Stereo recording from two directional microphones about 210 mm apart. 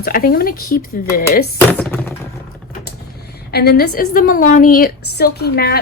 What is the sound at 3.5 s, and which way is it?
A woman's voice, 50° left (ahead or behind).